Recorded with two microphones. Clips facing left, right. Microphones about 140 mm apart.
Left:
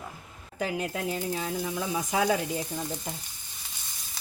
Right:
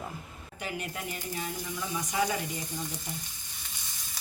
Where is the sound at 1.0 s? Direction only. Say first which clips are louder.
Left 6 dB; 90° left.